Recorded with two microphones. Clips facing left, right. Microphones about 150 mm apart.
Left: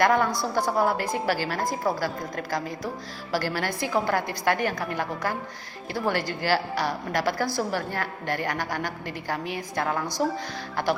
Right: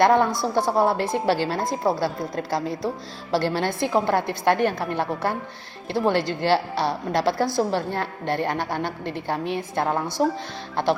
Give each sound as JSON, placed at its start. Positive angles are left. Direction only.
{"t": 0.0, "sound": "a woman's voice", "side_deg": -25}